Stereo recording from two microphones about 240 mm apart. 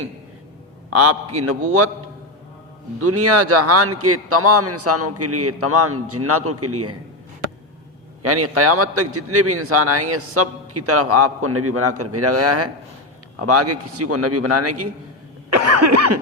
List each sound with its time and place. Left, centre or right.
0.9 s a man's voice: right
3.0 s a man's voice: right
8.2 s a man's voice: right
15.4 s cough: right